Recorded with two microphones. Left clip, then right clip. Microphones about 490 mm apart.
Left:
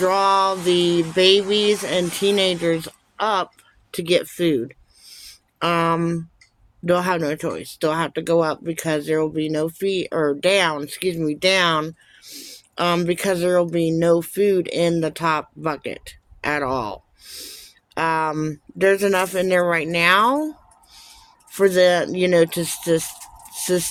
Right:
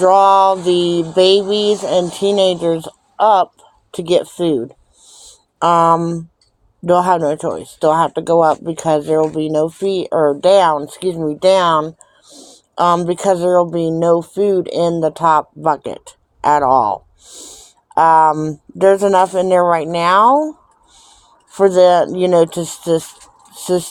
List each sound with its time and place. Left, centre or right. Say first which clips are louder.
0.0 s speech: right 8 dB; left
5.0 s a sound: even; left
5.9 s speech: right 8 dB; left